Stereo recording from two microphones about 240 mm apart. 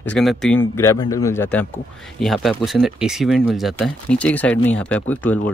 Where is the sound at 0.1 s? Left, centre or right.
Centre.